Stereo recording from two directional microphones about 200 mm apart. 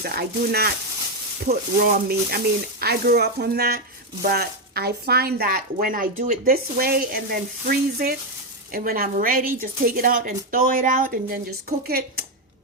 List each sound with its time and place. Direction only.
0.0 s speech: 50° right (ahead or behind)